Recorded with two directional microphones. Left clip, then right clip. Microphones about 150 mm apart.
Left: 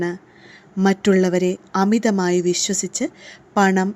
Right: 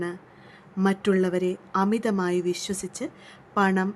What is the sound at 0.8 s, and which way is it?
A woman's voice, 30° left (ahead or behind).